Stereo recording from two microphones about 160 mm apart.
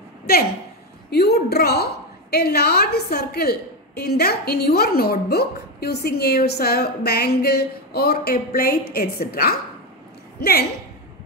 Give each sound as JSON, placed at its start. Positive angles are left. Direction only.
{"t": 0.3, "sound": "a woman's voice", "side_deg": 75}
{"t": 1.1, "sound": "a woman's voice", "side_deg": 90}